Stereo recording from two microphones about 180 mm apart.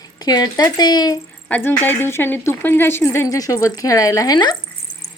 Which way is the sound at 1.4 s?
10° left (ahead or behind).